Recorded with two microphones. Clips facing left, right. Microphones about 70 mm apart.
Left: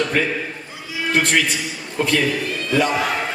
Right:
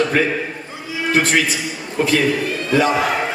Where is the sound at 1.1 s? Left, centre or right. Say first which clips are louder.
Right 2 dB; centre.